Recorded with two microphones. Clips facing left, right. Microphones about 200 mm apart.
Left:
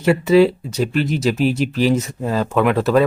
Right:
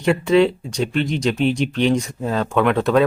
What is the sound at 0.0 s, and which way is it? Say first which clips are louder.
Speech: left 2 dB; 5° left (ahead or behind).